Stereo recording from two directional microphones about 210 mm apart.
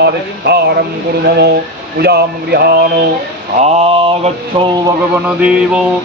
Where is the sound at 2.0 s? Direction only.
50° right (ahead or behind).